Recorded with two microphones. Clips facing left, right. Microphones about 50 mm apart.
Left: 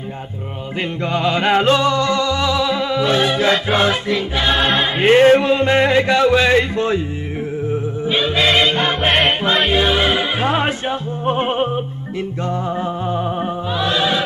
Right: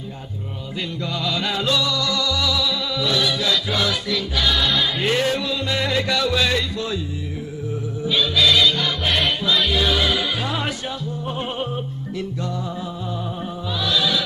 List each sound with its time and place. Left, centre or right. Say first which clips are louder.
1.0 s music: left 8 dB; left